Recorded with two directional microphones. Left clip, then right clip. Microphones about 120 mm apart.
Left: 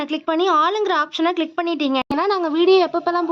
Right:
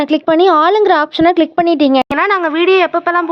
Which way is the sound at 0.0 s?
50° right (ahead or behind).